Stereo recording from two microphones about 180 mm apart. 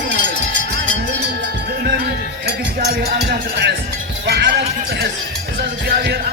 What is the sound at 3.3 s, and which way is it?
Cowbell, 70° right (ahead or behind).